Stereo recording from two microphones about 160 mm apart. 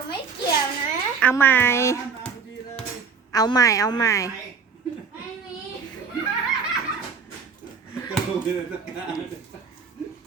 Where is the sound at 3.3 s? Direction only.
25° left (ahead or behind).